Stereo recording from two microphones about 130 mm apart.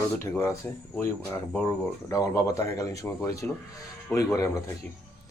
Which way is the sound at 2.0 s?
25° left (ahead or behind).